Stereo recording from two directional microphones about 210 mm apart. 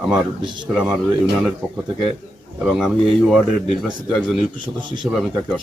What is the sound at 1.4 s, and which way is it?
A man's voice, centre (ahead or behind).